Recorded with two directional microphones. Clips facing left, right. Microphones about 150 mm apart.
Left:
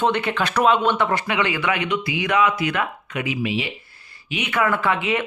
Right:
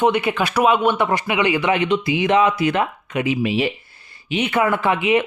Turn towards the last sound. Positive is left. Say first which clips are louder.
# right 4 dB
turn(degrees=-20)  # may be behind; listen again after turning